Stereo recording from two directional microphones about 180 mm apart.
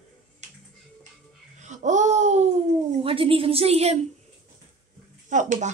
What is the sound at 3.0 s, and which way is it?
Speech, 30° right (ahead or behind).